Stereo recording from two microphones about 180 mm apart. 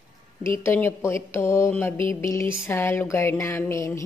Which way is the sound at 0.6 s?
10° left (ahead or behind).